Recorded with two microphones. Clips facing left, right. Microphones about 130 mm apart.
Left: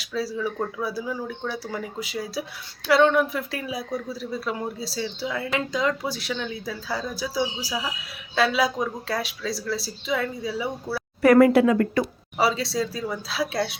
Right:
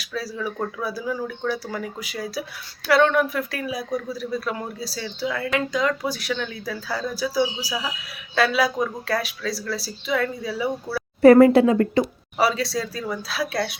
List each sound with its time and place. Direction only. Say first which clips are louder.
0.0 s speech: left 2 dB; 25° left (ahead or behind)
11.2 s speech: right 4 dB; 30° right (ahead or behind)
12.4 s speech: right 1 dB; 25° left (ahead or behind)